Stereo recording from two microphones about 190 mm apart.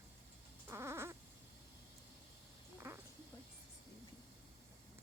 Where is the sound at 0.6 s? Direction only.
15° right (ahead or behind).